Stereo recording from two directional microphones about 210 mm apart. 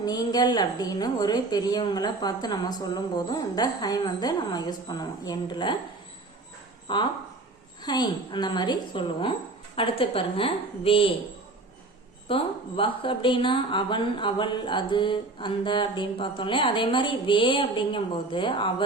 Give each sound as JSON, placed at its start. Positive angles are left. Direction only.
{"t": 0.0, "sound": "speech", "side_deg": 20}
{"t": 6.8, "sound": "speech", "side_deg": 20}
{"t": 12.3, "sound": "speech", "side_deg": 25}